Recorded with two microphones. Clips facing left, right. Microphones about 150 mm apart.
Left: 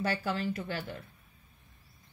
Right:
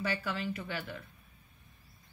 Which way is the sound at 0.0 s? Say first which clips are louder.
Left 3 dB; 40° left (ahead or behind).